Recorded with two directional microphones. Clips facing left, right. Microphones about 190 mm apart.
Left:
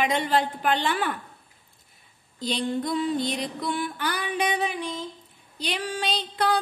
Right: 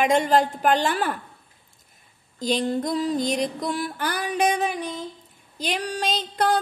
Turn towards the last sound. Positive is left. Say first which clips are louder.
# right 2 dB
turn(degrees=-45)  # may be behind; listen again after turning